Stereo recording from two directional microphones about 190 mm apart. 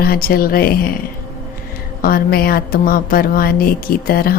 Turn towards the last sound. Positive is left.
turn(degrees=50)  # may be behind; listen again after turning